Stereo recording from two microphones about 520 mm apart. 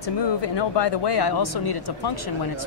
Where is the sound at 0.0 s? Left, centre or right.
Left.